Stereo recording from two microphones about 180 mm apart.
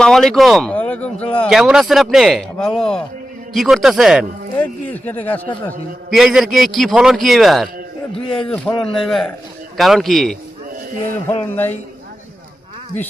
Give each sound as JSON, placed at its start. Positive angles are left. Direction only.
{"t": 0.0, "sound": "a man's voice", "side_deg": 0}
{"t": 1.5, "sound": "a man's voice", "side_deg": -5}
{"t": 4.5, "sound": "speech", "side_deg": 10}
{"t": 6.1, "sound": "a man's voice", "side_deg": 0}
{"t": 8.1, "sound": "a man's voice", "side_deg": 30}
{"t": 8.4, "sound": "a man's voice", "side_deg": 5}
{"t": 11.5, "sound": "speech", "side_deg": 10}